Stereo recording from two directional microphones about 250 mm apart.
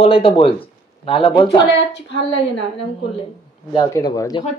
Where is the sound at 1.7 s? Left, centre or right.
Left.